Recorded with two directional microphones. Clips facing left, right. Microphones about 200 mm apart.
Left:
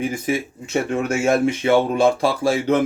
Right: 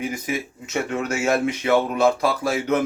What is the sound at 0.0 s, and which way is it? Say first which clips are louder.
A man's voice: left 4 dB; 30° left (ahead or behind).